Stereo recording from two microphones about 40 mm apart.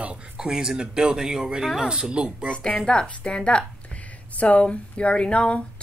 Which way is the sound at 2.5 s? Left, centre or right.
Left.